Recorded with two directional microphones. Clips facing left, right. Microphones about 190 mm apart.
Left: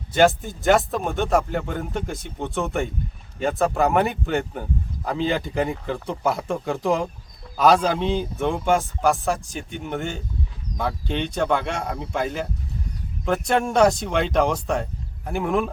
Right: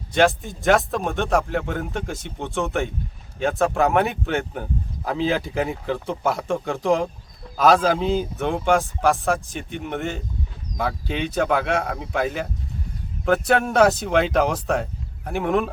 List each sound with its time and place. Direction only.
0.1 s speech: centre (ahead or behind)